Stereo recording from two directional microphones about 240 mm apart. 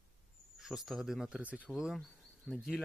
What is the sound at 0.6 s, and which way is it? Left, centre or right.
Speech, centre.